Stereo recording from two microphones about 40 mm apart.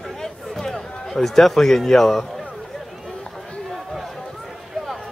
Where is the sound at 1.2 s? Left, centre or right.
Centre.